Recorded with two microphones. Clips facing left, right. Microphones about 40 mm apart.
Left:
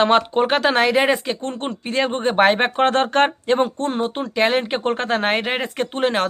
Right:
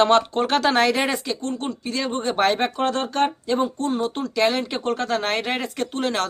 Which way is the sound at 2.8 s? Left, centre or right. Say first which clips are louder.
Left 5 dB; left.